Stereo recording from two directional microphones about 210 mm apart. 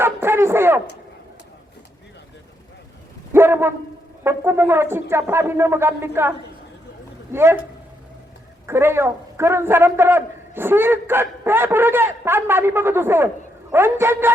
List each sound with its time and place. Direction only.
0.0 s dog: 10° right (ahead or behind)
3.3 s a sound: 10° right (ahead or behind)
4.2 s a man's voice: 10° right (ahead or behind)
7.3 s a man's voice: 10° right (ahead or behind)
8.6 s a man's voice: 10° right (ahead or behind)